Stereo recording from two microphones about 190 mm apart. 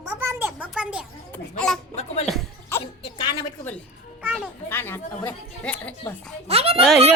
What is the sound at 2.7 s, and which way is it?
Music, 15° left (ahead or behind).